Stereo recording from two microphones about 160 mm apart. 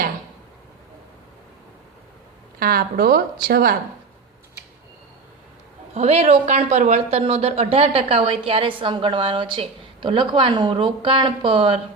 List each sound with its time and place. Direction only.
2.6 s speech: 65° right (ahead or behind)
5.9 s speech: 40° right (ahead or behind)